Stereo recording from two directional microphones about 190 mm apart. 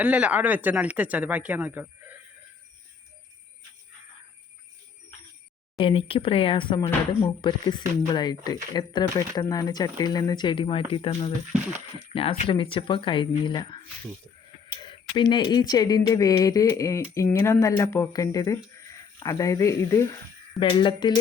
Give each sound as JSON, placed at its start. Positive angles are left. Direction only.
{"t": 0.0, "sound": "speech", "side_deg": -5}
{"t": 5.7, "sound": "speech", "side_deg": 30}
{"t": 20.6, "sound": "speech", "side_deg": 25}